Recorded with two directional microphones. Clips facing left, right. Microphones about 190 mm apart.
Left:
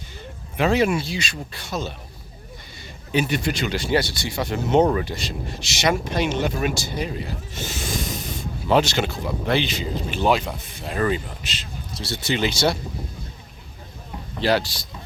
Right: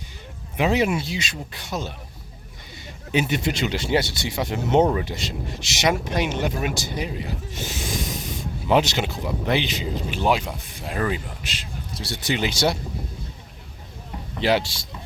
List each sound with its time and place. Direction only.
0.5 s speech: 15° right (ahead or behind)
3.2 s speech: 20° right (ahead or behind)
14.4 s speech: 20° right (ahead or behind)